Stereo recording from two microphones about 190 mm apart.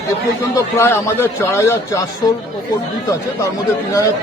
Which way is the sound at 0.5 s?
15° left (ahead or behind).